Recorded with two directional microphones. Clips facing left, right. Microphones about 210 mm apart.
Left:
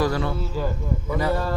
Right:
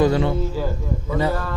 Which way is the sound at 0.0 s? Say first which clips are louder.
Right 5 dB; 20° right (ahead or behind).